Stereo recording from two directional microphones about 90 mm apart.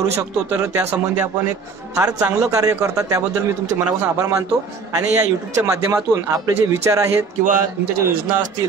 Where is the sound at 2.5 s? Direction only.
35° right (ahead or behind).